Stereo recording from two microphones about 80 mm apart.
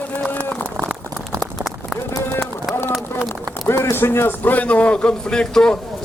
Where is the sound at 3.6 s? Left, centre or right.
Left.